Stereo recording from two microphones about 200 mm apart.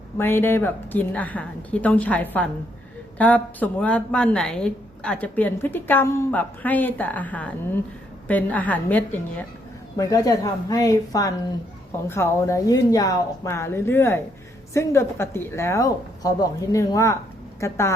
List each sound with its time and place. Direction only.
0.2 s a woman's voice: 10° left (ahead or behind)